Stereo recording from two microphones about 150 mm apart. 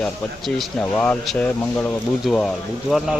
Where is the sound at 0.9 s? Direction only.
10° left (ahead or behind).